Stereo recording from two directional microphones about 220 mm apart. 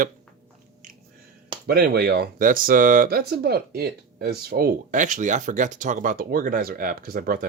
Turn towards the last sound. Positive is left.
turn(degrees=-40)  # may be behind; listen again after turning